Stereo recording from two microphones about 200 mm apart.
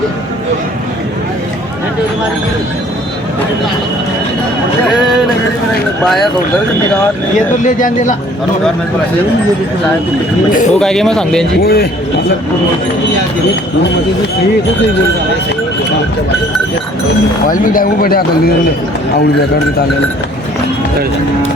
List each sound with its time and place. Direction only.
6.0 s speech: centre (ahead or behind)
7.6 s speech: 40° left (ahead or behind)
10.8 s speech: 5° left (ahead or behind)
11.6 s speech: 50° left (ahead or behind)
17.5 s speech: 40° left (ahead or behind)